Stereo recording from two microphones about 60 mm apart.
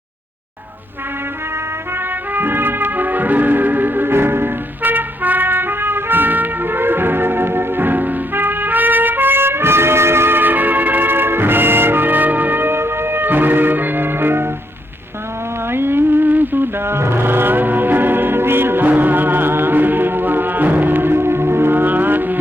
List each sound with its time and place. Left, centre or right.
2.3 s music: right
15.7 s music: right